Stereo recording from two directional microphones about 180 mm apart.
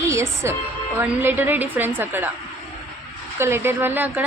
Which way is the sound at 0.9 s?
10° right (ahead or behind).